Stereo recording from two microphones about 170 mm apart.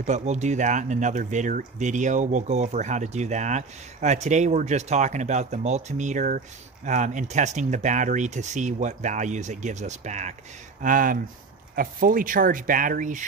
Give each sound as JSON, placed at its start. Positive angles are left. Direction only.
{"t": 0.0, "sound": "speech", "side_deg": -40}